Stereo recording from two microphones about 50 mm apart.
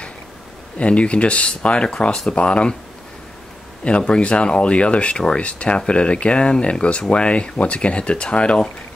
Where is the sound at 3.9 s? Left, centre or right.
Left.